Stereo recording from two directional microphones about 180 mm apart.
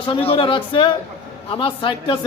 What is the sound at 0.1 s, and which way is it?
A man's voice, 30° left (ahead or behind).